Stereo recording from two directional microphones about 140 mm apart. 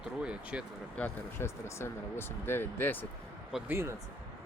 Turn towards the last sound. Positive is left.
turn(degrees=-15)  # may be behind; listen again after turning